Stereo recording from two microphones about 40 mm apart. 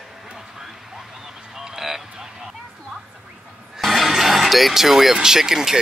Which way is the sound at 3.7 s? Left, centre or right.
Centre.